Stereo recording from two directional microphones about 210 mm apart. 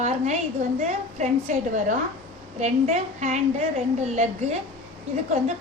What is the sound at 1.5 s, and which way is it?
A woman's voice, 35° right (ahead or behind).